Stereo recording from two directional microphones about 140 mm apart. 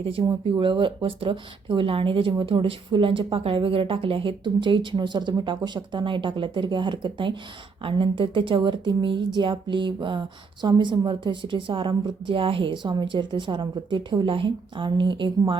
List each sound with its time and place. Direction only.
0.0 s speech: 35° right (ahead or behind)